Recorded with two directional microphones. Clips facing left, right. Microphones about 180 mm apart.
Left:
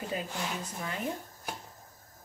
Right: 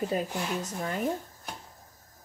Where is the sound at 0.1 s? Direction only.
45° right (ahead or behind).